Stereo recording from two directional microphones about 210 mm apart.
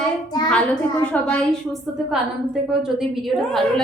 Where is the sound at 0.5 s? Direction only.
5° left (ahead or behind).